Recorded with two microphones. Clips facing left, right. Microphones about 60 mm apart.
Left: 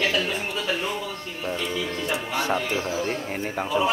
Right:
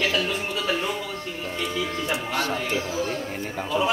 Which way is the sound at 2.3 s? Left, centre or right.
Left.